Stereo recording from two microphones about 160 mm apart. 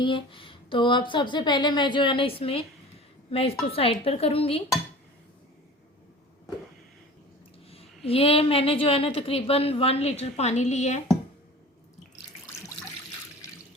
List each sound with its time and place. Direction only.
0.0 s a woman's voice: 30° left (ahead or behind)
3.7 s a woman's voice: 35° left (ahead or behind)
7.7 s a woman's voice: 40° left (ahead or behind)